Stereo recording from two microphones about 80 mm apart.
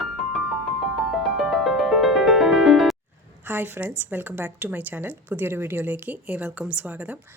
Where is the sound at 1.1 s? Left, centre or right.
Centre.